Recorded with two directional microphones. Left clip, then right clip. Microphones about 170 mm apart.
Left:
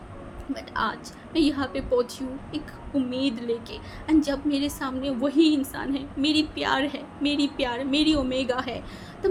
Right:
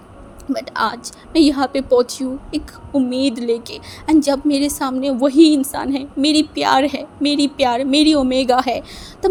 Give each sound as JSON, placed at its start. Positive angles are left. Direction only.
{"t": 0.5, "sound": "a woman's voice", "side_deg": -55}